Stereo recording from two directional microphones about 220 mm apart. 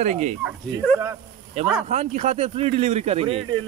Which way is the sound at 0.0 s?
30° right (ahead or behind).